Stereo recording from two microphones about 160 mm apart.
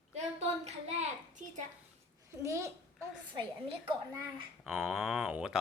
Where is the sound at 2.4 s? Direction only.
20° right (ahead or behind).